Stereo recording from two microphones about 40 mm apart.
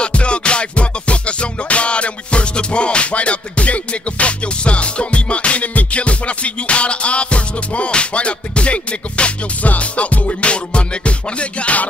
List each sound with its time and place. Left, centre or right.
0.0 s music: left